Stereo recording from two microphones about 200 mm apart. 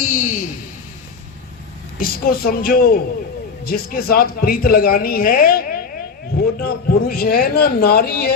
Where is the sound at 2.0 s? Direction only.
45° left (ahead or behind).